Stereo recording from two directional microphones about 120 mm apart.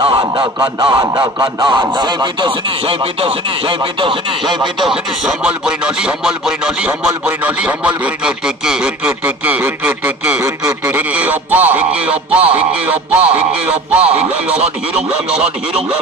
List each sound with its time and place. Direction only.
0.0 s a sound: 40° right (ahead or behind)
0.9 s speech: 30° right (ahead or behind)
2.9 s speech: 50° right (ahead or behind)
4.8 s speech: 5° right (ahead or behind)
10.4 s a sound: 25° right (ahead or behind)
11.0 s speech: 15° right (ahead or behind)